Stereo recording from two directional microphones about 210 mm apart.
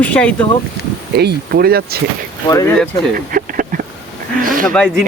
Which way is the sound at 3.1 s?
40° right (ahead or behind).